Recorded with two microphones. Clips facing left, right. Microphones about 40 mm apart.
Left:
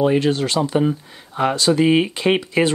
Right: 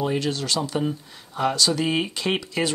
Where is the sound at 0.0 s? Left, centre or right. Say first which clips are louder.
Left 8 dB; left.